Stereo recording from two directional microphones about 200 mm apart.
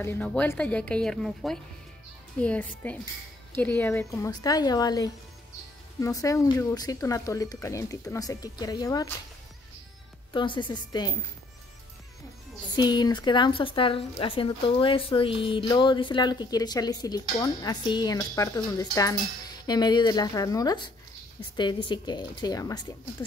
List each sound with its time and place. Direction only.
0.0 s speech: 10° left (ahead or behind)
10.3 s speech: 25° left (ahead or behind)
12.7 s speech: 20° left (ahead or behind)